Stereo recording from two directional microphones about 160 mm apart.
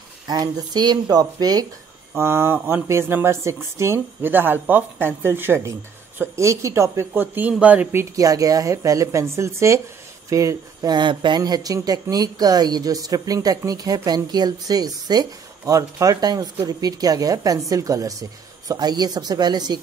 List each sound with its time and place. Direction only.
0.3 s speech: 25° right (ahead or behind)